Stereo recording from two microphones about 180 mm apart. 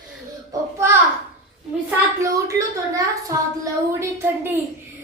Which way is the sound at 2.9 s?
20° right (ahead or behind).